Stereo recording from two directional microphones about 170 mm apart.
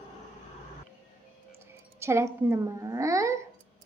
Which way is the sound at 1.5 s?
15° right (ahead or behind).